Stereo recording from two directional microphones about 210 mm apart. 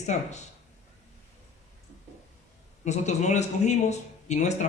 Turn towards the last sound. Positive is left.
turn(degrees=35)  # may be behind; listen again after turning